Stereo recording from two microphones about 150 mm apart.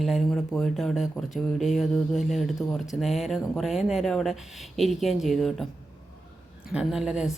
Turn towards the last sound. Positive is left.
turn(degrees=-5)  # may be behind; listen again after turning